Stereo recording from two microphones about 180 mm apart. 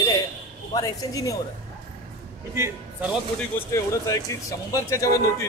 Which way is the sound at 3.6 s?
20° left (ahead or behind).